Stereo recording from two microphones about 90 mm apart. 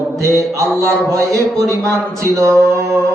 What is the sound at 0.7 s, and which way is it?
Speech, 5° left (ahead or behind).